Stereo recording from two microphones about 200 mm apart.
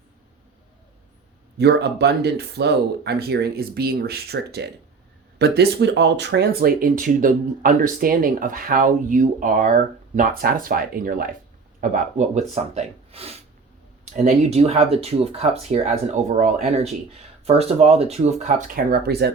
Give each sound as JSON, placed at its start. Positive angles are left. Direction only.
{"t": 1.5, "sound": "speech", "side_deg": -55}